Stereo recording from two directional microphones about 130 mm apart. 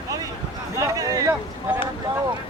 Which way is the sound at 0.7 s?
25° right (ahead or behind).